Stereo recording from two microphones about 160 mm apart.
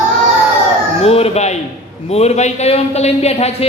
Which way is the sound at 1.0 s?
40° left (ahead or behind).